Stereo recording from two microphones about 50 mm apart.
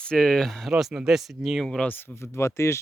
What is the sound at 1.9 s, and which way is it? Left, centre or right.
Speech, left.